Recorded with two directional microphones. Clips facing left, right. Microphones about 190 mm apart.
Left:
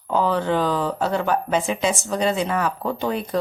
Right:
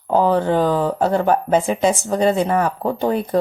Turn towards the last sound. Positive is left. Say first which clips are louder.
# right 5 dB
turn(degrees=-45)  # may be behind; listen again after turning